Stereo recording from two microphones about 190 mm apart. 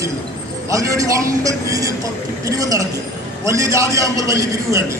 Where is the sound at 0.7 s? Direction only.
15° right (ahead or behind).